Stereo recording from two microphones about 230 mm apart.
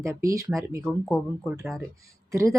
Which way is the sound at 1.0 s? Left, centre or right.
Centre.